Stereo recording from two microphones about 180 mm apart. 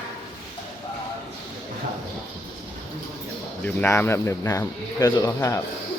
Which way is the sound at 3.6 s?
10° left (ahead or behind).